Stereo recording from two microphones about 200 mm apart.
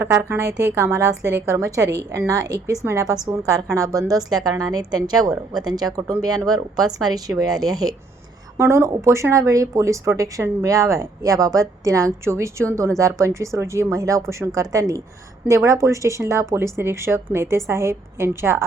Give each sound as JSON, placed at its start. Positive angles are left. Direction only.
{"t": 0.0, "sound": "a woman's voice", "side_deg": -15}